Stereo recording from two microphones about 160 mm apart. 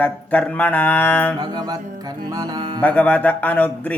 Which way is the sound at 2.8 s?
10° left (ahead or behind).